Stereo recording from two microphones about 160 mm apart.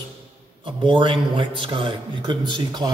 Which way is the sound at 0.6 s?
30° right (ahead or behind).